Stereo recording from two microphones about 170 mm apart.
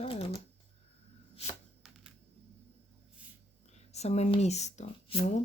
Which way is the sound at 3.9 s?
40° left (ahead or behind).